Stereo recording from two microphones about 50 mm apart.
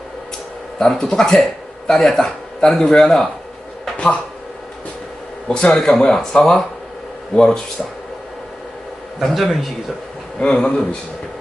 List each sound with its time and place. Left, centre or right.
0.8 s a man's voice: centre
5.5 s a man's voice: centre
9.2 s speech: centre
10.4 s a man's voice: centre